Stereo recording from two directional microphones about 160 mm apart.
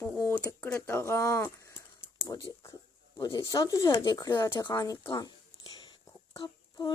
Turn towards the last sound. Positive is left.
turn(degrees=25)  # may be behind; listen again after turning